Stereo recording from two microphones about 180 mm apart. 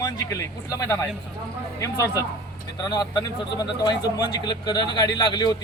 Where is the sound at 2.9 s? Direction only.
25° left (ahead or behind).